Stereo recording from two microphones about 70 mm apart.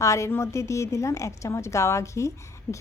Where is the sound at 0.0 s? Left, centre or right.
Left.